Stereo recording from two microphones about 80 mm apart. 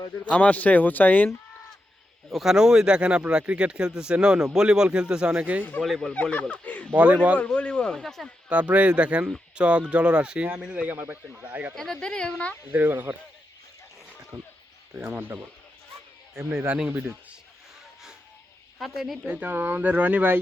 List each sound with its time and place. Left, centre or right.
0.3 s speech: centre
2.3 s speech: centre
5.8 s speech: centre
6.3 s speech: centre
6.9 s speech: centre
7.4 s speech: centre
8.4 s speech: centre
11.7 s speech: centre
12.7 s speech: right
14.3 s speech: right
15.0 s speech: right
18.8 s speech: centre
19.5 s speech: right